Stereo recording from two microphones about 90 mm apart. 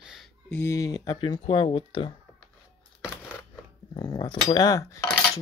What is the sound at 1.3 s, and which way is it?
Speech, 60° left (ahead or behind).